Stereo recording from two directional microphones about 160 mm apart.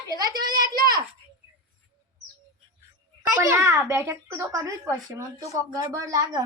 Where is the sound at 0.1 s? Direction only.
25° right (ahead or behind).